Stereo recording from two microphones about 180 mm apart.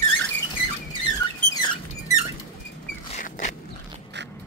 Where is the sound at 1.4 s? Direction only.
20° left (ahead or behind).